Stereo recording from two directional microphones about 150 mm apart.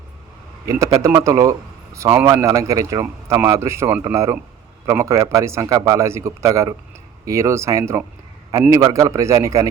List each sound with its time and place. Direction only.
0.8 s speech: 25° right (ahead or behind)